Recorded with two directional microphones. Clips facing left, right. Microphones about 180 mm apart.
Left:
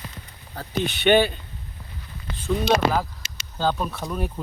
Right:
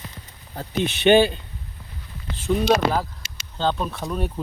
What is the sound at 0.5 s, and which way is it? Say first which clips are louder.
Speech: right 2 dB; 25° right (ahead or behind).